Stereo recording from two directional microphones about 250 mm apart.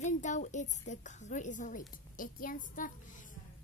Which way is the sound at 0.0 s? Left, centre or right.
Left.